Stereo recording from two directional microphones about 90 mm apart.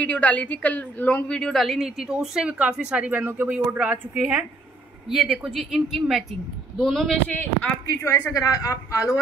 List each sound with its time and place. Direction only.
0.0 s a woman's voice: 15° left (ahead or behind)
7.2 s speech: 15° left (ahead or behind)
8.0 s a woman's voice: 35° left (ahead or behind)